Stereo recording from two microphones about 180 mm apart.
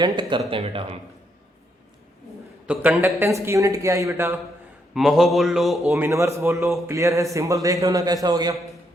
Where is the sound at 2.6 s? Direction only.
10° right (ahead or behind).